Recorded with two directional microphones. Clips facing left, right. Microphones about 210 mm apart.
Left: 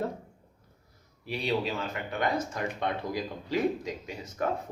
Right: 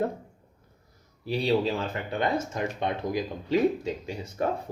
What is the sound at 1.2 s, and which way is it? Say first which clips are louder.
Speech: right 5 dB; 35° right (ahead or behind).